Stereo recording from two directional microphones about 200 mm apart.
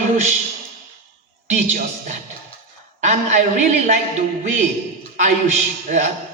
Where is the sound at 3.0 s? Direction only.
35° right (ahead or behind).